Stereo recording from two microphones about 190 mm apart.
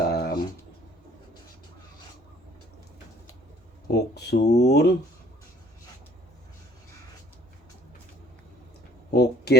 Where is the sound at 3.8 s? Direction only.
60° left (ahead or behind).